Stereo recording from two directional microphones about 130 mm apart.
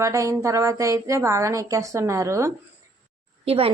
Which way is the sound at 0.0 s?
25° right (ahead or behind).